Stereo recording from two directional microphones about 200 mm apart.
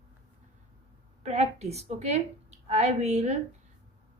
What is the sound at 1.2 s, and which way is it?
A woman's voice, 30° right (ahead or behind).